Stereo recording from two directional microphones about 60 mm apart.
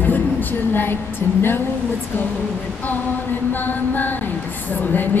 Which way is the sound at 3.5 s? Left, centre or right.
Left.